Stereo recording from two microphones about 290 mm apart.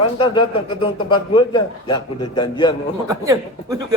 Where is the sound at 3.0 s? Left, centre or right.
Centre.